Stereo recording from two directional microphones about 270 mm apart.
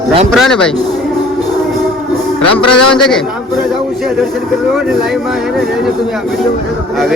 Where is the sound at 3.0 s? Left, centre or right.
Centre.